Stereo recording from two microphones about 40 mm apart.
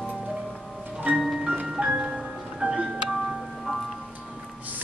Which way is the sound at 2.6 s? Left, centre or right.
Right.